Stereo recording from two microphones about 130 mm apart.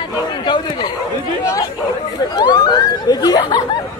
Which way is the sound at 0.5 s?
35° left (ahead or behind).